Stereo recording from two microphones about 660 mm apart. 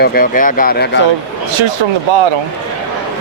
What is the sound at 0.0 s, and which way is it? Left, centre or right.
Speech, centre.